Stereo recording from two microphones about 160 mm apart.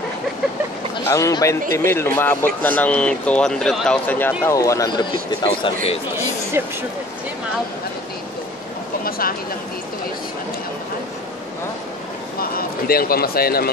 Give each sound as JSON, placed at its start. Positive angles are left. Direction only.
{"t": 1.0, "sound": "speech", "side_deg": 20}
{"t": 1.6, "sound": "speech", "side_deg": -60}
{"t": 1.9, "sound": "a man's voice", "side_deg": 15}
{"t": 5.4, "sound": "speech", "side_deg": 35}
{"t": 6.6, "sound": "speech", "side_deg": -15}
{"t": 12.4, "sound": "speech", "side_deg": 70}